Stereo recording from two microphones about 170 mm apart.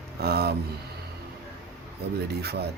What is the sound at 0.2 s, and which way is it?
Speech, 70° right (ahead or behind).